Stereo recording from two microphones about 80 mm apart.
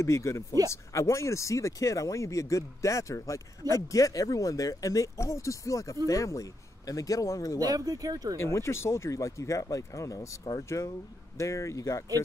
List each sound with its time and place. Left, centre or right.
0.0 s speech: left
7.5 s speech: right
8.4 s speech: left
11.3 s speech: left